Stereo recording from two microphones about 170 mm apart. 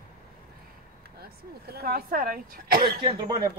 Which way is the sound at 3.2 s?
20° right (ahead or behind).